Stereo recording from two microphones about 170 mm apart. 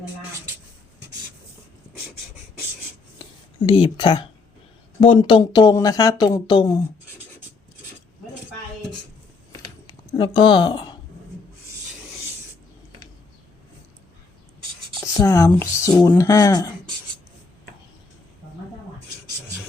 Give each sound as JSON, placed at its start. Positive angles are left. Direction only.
{"t": 3.7, "sound": "speech", "side_deg": 30}
{"t": 9.5, "sound": "a sound", "side_deg": 25}
{"t": 15.0, "sound": "speech", "side_deg": 20}